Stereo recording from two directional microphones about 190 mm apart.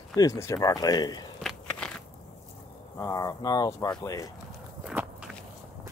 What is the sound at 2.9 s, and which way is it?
Speech, 15° left (ahead or behind).